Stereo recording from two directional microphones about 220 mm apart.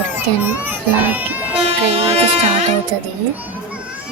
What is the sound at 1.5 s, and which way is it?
Music, 25° right (ahead or behind).